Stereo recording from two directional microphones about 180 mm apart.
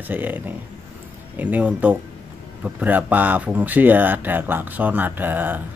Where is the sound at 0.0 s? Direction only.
10° right (ahead or behind).